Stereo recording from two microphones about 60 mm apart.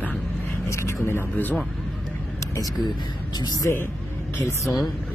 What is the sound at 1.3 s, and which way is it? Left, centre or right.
Speech, left.